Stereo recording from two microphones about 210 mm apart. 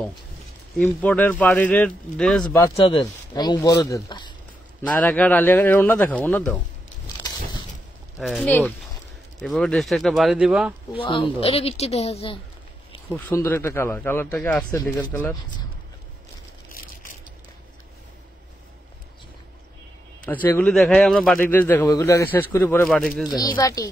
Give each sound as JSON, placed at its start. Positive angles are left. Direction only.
{"t": 0.7, "sound": "speech", "side_deg": 5}
{"t": 2.4, "sound": "speech", "side_deg": 15}
{"t": 4.8, "sound": "speech", "side_deg": 5}
{"t": 8.2, "sound": "speech", "side_deg": 0}
{"t": 11.0, "sound": "speech", "side_deg": 25}
{"t": 13.1, "sound": "speech", "side_deg": 10}
{"t": 20.4, "sound": "speech", "side_deg": 10}
{"t": 22.8, "sound": "speech", "side_deg": 0}
{"t": 23.5, "sound": "speech", "side_deg": 15}